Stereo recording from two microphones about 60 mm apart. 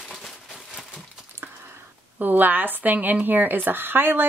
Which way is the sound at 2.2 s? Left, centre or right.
Right.